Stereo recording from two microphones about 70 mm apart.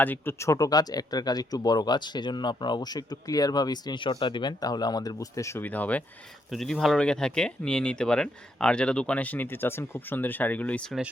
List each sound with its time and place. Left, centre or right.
0.0 s speech: left
0.3 s speech: left
5.5 s speech: left
6.5 s speech: centre; by 10.8 s left